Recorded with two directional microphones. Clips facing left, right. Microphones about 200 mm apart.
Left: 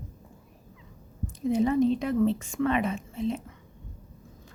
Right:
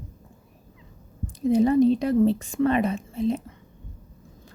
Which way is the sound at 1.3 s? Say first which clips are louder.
Right 5 dB; 35° right (ahead or behind).